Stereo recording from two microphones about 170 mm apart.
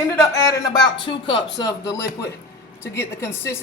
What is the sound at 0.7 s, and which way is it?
Speech, 25° left (ahead or behind).